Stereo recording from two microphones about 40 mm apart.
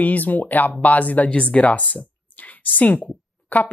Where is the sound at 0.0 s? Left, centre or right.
Left.